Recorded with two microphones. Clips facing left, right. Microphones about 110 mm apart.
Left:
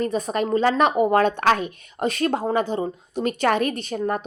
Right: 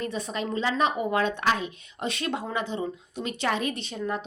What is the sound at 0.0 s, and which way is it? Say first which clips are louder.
Speech: left 8 dB; 45° left (ahead or behind).